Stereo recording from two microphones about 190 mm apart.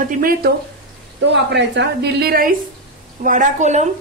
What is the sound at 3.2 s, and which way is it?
Speech, 40° right (ahead or behind).